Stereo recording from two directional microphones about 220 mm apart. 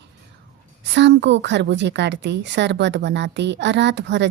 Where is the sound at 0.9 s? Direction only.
50° right (ahead or behind).